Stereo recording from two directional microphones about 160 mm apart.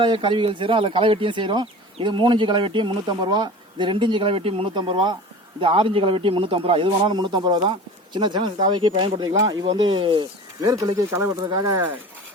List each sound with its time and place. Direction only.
0.0 s speech: 30° right (ahead or behind)